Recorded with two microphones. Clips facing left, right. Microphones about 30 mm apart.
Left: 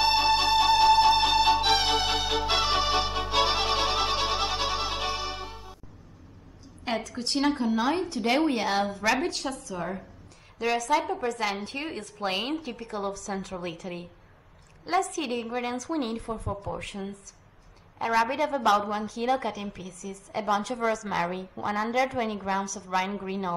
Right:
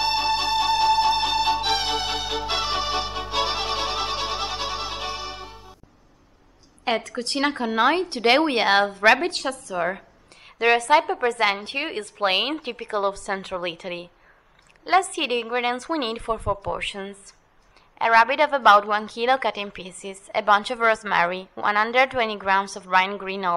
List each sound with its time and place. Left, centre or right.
0.0 s music: centre
6.8 s a woman's voice: right
9.7 s a woman's voice: right
17.9 s a woman's voice: right
18.3 s a woman's voice: right
20.4 s a woman's voice: right
22.8 s a woman's voice: right